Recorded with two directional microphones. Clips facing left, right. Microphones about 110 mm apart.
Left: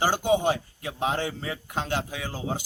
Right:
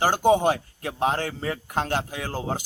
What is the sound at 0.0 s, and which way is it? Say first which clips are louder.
A man's voice: right 3 dB; 45° right (ahead or behind).